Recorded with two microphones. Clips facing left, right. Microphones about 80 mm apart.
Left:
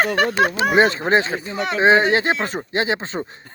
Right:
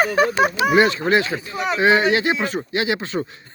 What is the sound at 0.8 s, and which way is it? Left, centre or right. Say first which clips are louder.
Speech: left 1 dB; left.